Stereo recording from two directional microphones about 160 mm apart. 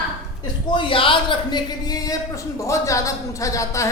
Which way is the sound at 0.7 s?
30° left (ahead or behind).